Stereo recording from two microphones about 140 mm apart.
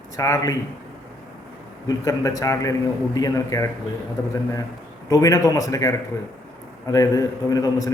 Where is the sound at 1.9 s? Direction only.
25° left (ahead or behind).